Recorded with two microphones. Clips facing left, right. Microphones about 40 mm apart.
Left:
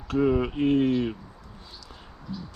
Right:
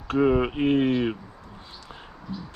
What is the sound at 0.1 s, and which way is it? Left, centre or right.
Speech, right.